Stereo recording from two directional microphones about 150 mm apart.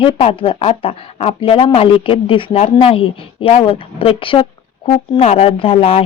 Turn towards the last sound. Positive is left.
turn(degrees=40)  # may be behind; listen again after turning